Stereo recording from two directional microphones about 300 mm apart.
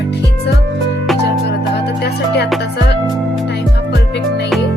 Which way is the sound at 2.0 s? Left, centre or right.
Left.